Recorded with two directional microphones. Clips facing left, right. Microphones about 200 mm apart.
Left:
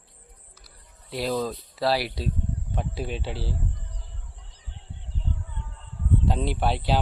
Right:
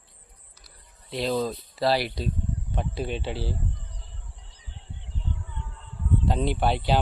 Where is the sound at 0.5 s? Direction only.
5° left (ahead or behind).